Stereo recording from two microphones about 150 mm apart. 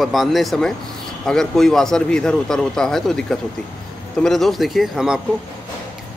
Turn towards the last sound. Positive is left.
turn(degrees=0)  # may be behind; listen again after turning